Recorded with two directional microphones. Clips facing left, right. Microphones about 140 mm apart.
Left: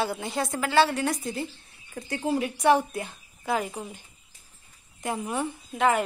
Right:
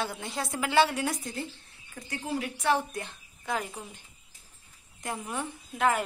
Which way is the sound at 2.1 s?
20° left (ahead or behind).